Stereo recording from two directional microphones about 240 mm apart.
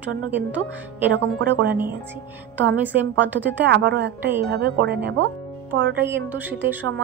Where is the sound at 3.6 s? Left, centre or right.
Right.